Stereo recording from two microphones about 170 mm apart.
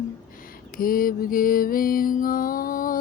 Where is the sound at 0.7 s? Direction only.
55° left (ahead or behind).